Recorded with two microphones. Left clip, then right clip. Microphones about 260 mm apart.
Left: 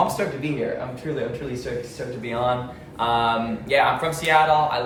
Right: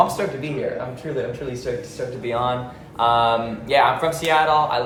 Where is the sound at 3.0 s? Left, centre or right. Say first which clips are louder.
Right 4 dB; centre.